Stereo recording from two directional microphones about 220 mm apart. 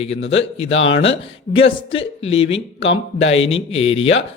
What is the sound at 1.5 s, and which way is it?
Speech, 25° left (ahead or behind).